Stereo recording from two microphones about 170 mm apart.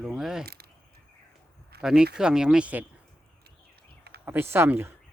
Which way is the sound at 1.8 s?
5° right (ahead or behind).